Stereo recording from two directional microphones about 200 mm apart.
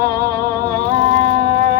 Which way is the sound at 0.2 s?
50° right (ahead or behind).